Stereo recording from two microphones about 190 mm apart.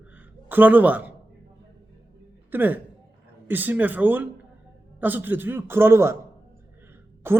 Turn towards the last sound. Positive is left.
turn(degrees=-10)  # may be behind; listen again after turning